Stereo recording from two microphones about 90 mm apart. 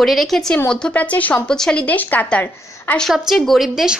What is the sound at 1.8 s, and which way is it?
A woman's voice, 20° left (ahead or behind).